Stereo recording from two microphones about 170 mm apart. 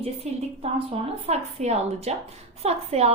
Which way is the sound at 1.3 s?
40° right (ahead or behind).